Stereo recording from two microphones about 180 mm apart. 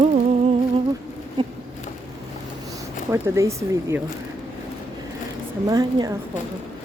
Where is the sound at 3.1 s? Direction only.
15° right (ahead or behind).